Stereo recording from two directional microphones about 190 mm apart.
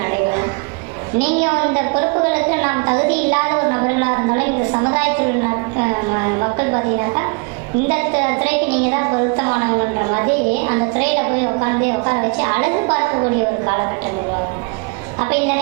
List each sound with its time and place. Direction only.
1.2 s a woman's voice: 15° right (ahead or behind)
4.9 s a woman's voice: 10° right (ahead or behind)